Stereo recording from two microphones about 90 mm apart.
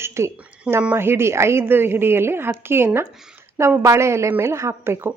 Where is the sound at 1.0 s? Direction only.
25° right (ahead or behind).